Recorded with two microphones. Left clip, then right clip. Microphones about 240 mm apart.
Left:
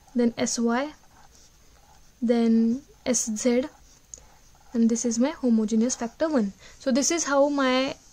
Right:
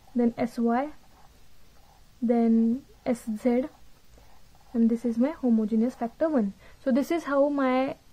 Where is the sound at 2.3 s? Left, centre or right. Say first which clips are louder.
Left 1 dB; left.